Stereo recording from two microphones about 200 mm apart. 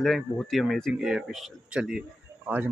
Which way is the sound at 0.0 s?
Centre (ahead or behind).